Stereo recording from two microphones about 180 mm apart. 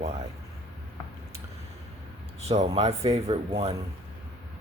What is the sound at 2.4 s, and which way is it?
Speech, 35° right (ahead or behind).